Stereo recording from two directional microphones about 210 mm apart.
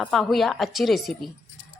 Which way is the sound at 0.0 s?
Centre (ahead or behind).